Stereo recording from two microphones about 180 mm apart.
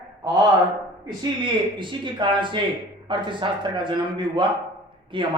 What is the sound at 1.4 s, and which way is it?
Speech, 25° right (ahead or behind).